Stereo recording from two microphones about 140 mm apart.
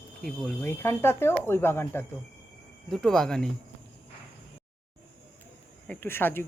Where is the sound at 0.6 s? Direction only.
15° left (ahead or behind).